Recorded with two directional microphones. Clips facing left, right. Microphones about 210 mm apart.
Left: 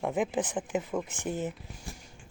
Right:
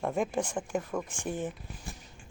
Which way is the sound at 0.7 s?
20° left (ahead or behind).